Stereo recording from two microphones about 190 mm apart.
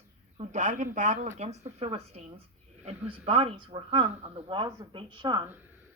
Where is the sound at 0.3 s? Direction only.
40° right (ahead or behind).